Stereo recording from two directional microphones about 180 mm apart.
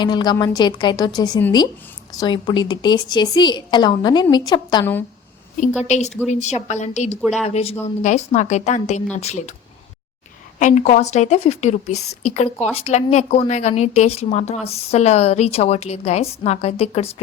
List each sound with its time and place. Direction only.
0.0 s a woman's voice: 25° left (ahead or behind)
6.2 s a woman's voice: 40° left (ahead or behind)
7.2 s speech: centre (ahead or behind)
7.4 s a woman's voice: 35° left (ahead or behind)
10.6 s a woman's voice: 40° left (ahead or behind)